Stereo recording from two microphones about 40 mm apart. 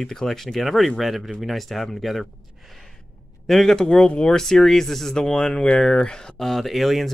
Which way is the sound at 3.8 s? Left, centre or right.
Left.